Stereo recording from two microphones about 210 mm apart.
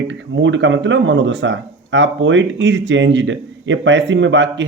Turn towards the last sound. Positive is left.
turn(degrees=-60)  # may be behind; listen again after turning